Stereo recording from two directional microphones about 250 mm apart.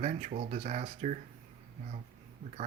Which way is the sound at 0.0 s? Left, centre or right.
Right.